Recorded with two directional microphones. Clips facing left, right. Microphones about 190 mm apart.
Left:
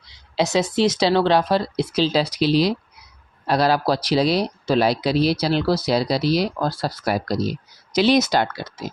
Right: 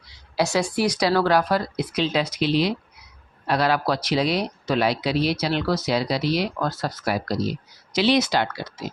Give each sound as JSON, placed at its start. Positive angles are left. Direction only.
{"t": 0.3, "sound": "a woman's voice", "side_deg": 20}